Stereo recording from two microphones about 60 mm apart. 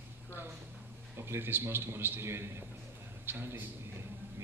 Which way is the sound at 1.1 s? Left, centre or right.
Right.